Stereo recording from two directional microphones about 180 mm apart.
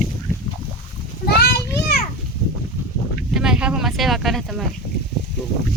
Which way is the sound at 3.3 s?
5° right (ahead or behind).